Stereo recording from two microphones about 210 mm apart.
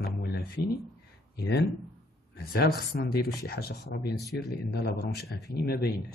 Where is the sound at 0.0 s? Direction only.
50° left (ahead or behind).